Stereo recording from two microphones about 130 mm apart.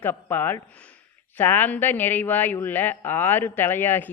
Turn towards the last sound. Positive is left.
turn(degrees=15)  # may be behind; listen again after turning